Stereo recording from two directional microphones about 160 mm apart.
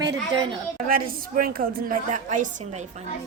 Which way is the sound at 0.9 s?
60° right (ahead or behind).